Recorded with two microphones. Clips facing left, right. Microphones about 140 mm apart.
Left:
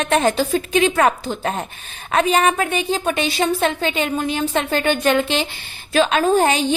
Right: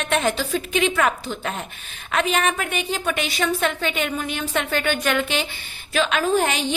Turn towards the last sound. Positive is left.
turn(degrees=35)  # may be behind; listen again after turning